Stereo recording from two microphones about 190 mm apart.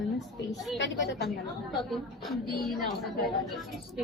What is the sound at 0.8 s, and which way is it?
Speech, 65° left (ahead or behind).